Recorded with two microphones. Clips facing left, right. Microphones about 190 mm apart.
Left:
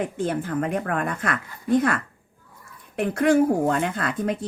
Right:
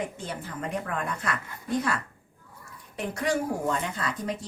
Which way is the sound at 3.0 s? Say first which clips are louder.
Left 9 dB; 55° left (ahead or behind).